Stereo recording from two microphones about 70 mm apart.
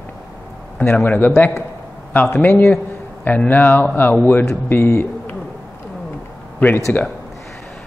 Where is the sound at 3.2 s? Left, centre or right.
Left.